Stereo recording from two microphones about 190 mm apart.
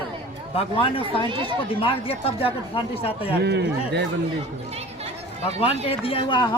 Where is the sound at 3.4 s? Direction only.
65° right (ahead or behind).